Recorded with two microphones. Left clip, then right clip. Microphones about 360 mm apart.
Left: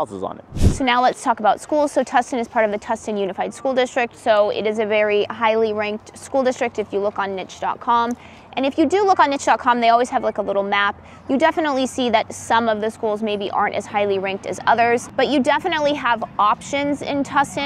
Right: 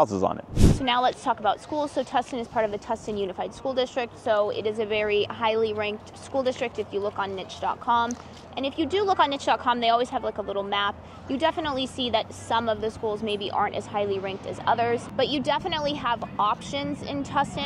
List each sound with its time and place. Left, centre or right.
0.0 s speech: right
0.7 s speech: left